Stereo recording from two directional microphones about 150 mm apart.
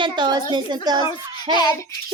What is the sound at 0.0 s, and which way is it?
Child singing, 30° right (ahead or behind).